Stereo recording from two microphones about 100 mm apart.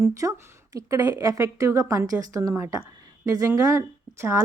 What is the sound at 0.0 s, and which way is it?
A woman's voice, 35° right (ahead or behind).